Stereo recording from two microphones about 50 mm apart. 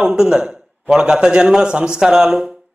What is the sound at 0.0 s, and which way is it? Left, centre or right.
A man's voice, centre.